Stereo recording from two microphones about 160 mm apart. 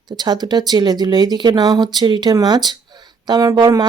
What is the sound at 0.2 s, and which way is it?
Speech, 25° right (ahead or behind).